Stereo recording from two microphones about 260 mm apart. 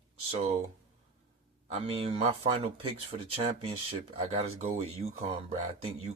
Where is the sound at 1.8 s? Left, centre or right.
Right.